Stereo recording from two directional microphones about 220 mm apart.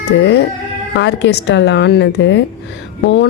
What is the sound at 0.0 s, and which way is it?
Speech, 50° left (ahead or behind).